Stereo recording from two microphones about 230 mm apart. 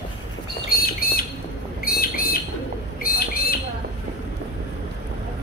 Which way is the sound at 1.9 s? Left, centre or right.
Left.